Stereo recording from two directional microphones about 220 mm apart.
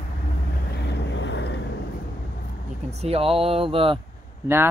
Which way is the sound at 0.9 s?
55° left (ahead or behind).